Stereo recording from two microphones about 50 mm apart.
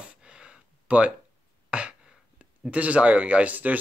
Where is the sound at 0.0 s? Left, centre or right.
Centre.